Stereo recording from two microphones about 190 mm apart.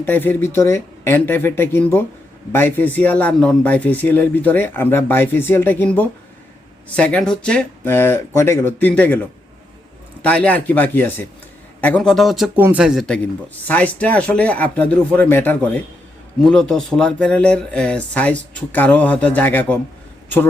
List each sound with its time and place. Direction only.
0.0 s speech: 10° left (ahead or behind)
10.2 s speech: 5° left (ahead or behind)